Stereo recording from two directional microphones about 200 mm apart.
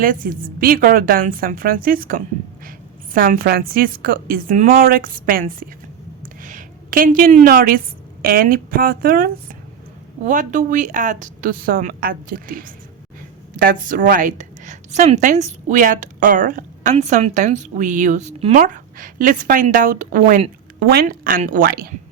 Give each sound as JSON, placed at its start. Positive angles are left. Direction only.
{"t": 0.0, "sound": "a woman's voice", "side_deg": -45}
{"t": 6.2, "sound": "a sound", "side_deg": -40}
{"t": 8.2, "sound": "a woman's voice", "side_deg": -45}
{"t": 20.8, "sound": "a woman's voice", "side_deg": -50}